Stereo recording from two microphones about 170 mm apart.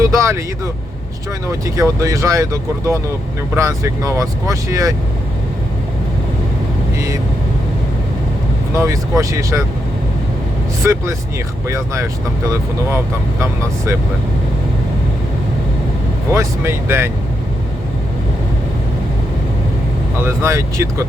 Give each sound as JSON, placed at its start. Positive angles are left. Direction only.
{"t": 0.0, "sound": "vehicle", "side_deg": -15}
{"t": 1.6, "sound": "speech", "side_deg": -20}
{"t": 8.7, "sound": "speech", "side_deg": -15}
{"t": 10.8, "sound": "speech", "side_deg": -15}
{"t": 16.3, "sound": "speech", "side_deg": -15}
{"t": 20.2, "sound": "speech", "side_deg": -15}